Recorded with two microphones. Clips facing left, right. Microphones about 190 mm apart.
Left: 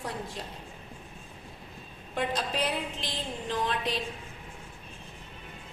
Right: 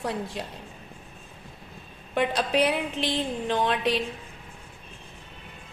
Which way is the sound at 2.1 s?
70° right (ahead or behind).